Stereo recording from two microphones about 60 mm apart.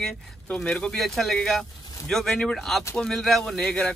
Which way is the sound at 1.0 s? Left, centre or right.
Centre.